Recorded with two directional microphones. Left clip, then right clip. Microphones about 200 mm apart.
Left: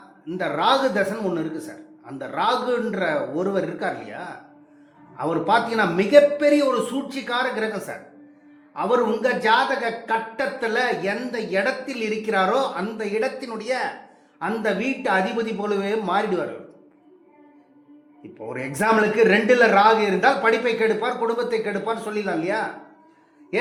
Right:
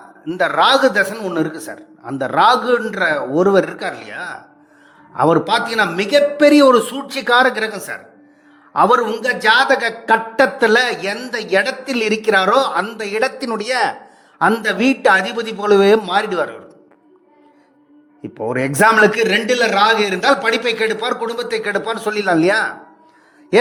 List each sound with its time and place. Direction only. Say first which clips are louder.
0.3 s a man's voice: right 7 dB; 60° right (ahead or behind); by 13.9 s 45° right (ahead or behind)
14.3 s a man's voice: right 9 dB; 55° right (ahead or behind)
18.2 s a man's voice: right 11 dB; 55° right (ahead or behind)
19.2 s a man's voice: right 1 dB; centre (ahead or behind)
20.5 s a man's voice: right 3 dB; 60° right (ahead or behind)